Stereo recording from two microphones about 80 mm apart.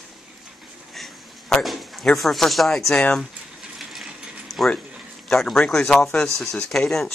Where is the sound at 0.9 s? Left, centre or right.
Centre.